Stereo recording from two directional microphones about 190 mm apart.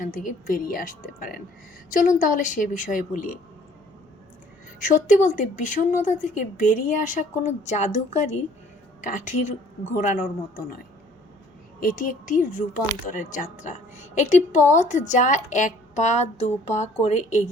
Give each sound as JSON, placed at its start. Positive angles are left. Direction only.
{"t": 0.0, "sound": "a woman's voice", "side_deg": 45}
{"t": 4.8, "sound": "a woman's voice", "side_deg": 40}
{"t": 9.0, "sound": "a sound", "side_deg": 40}
{"t": 9.4, "sound": "a woman's voice", "side_deg": 40}
{"t": 11.8, "sound": "a woman's voice", "side_deg": 45}